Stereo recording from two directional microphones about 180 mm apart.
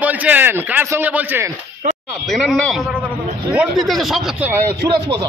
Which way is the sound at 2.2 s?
Centre (ahead or behind).